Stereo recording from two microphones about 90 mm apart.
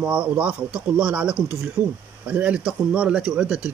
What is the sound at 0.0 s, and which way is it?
Speech, 15° right (ahead or behind).